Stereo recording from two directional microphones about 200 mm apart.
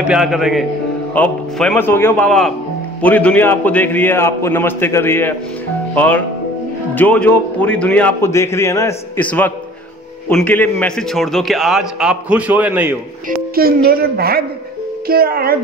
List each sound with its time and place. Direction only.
0.1 s a man's voice: centre (ahead or behind)
13.6 s a woman's voice: 50° right (ahead or behind)